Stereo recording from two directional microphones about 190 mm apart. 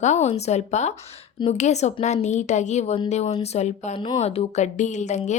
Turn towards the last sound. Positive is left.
turn(degrees=40)  # may be behind; listen again after turning